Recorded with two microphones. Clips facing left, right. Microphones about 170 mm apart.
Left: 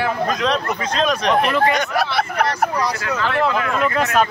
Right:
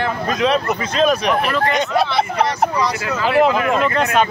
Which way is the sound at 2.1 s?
20° right (ahead or behind).